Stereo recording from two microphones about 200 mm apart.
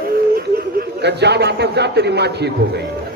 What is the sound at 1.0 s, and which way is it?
Speech, 55° right (ahead or behind).